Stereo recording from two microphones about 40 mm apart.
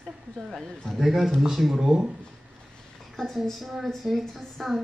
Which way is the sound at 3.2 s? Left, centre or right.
Centre.